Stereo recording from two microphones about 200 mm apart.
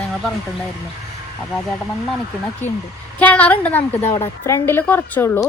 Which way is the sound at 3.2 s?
5° left (ahead or behind).